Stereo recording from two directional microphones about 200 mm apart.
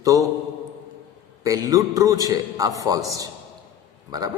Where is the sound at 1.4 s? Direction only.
15° right (ahead or behind).